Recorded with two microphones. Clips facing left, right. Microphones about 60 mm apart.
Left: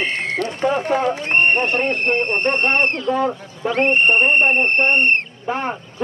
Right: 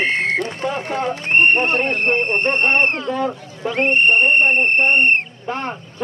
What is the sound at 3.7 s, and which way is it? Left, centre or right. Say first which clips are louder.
Speech: even; centre.